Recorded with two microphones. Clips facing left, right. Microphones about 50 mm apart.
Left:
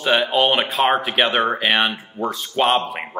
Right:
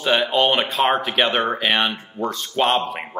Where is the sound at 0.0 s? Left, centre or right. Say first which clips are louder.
Left 1 dB; centre.